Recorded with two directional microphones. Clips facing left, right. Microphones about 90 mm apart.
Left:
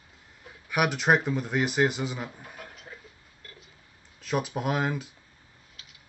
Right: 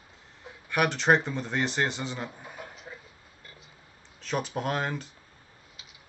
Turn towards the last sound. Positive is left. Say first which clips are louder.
# left 2 dB
turn(degrees=5)  # may be behind; listen again after turning